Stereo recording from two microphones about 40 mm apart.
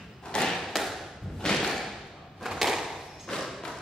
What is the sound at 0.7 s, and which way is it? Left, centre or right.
Thump, centre.